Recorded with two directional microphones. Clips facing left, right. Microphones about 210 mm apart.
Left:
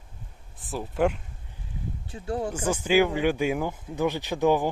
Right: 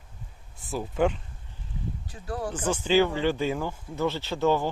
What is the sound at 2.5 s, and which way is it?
Speech, 10° left (ahead or behind).